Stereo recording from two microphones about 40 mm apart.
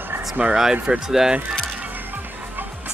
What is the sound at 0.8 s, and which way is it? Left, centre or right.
Speech, centre.